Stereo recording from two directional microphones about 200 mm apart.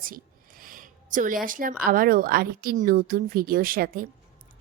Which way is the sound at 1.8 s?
45° right (ahead or behind).